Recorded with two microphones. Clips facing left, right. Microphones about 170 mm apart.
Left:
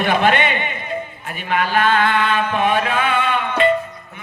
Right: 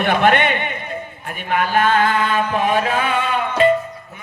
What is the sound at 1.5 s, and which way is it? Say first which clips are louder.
Chant: right 1 dB; 45° right (ahead or behind).